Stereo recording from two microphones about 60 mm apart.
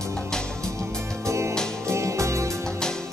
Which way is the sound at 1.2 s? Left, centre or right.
Right.